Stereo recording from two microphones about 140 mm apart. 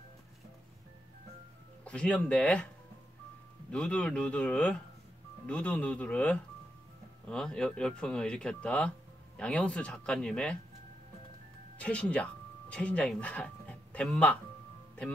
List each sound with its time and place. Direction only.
1.9 s speech: 10° left (ahead or behind)
3.7 s speech: 5° left (ahead or behind)
11.8 s speech: 10° left (ahead or behind)